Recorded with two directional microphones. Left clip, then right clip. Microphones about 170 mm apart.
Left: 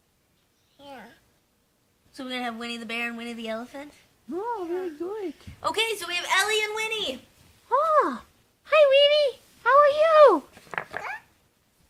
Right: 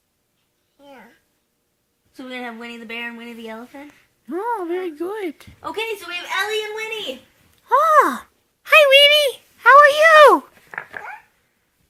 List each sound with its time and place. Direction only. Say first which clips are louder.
2.1 s speech: right 1 dB; 25° left (ahead or behind)
4.3 s speech: right 6 dB; 30° right (ahead or behind)
5.5 s a woman's voice: left 1 dB; 10° left (ahead or behind)
7.7 s a sound: right 8 dB; 20° right (ahead or behind)
8.6 s speech: right 7 dB; 20° right (ahead or behind)
10.5 s dog: right 1 dB; 50° left (ahead or behind)